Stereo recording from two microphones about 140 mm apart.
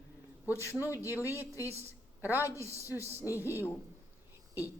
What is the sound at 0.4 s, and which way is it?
Speech, 20° right (ahead or behind).